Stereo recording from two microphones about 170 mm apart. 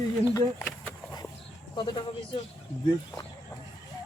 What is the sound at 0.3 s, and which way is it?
Speech, 10° left (ahead or behind).